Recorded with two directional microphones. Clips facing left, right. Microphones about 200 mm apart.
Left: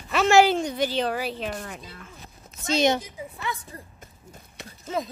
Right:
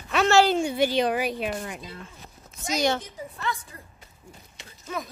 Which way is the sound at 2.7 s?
15° left (ahead or behind).